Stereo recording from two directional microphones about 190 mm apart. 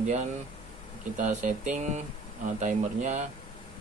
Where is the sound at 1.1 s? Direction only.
40° right (ahead or behind).